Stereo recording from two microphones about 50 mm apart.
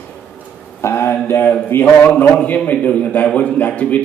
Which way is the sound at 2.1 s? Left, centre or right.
Left.